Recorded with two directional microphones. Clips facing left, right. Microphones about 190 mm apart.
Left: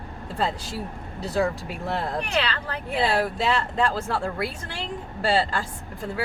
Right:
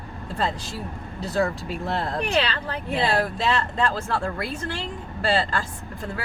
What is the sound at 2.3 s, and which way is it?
Speech, 25° right (ahead or behind).